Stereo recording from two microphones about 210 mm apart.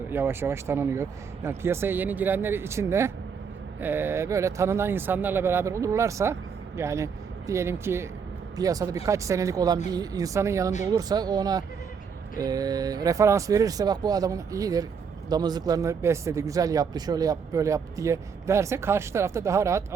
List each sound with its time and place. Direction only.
0.1 s speech: 10° right (ahead or behind)